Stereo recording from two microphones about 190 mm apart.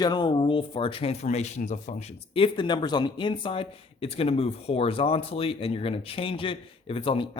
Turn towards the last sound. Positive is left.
turn(degrees=30)  # may be behind; listen again after turning